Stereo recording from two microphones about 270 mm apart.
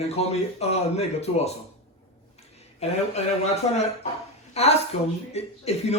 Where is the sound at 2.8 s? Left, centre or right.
Left.